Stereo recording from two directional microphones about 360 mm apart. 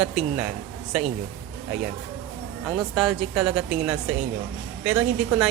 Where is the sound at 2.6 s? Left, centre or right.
Centre.